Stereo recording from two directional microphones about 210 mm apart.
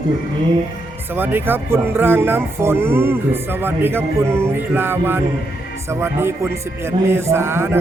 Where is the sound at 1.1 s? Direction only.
10° right (ahead or behind).